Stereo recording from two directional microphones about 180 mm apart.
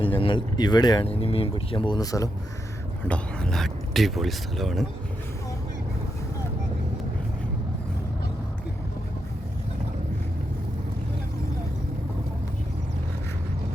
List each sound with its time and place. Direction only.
0.0 s speech: 30° left (ahead or behind)
3.1 s speech: 5° left (ahead or behind)